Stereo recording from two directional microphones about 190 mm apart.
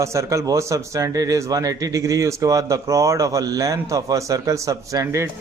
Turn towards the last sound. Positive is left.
turn(degrees=-15)  # may be behind; listen again after turning